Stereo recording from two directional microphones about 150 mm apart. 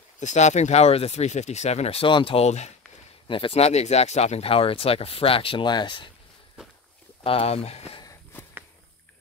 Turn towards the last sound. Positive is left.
turn(degrees=45)  # may be behind; listen again after turning